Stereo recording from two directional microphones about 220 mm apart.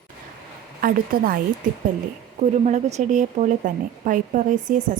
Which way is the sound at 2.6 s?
30° right (ahead or behind).